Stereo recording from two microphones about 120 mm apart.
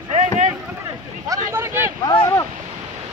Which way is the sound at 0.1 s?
90° right.